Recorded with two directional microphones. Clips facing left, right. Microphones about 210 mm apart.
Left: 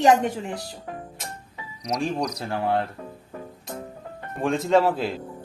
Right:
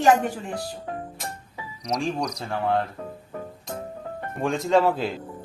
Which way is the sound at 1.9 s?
Centre (ahead or behind).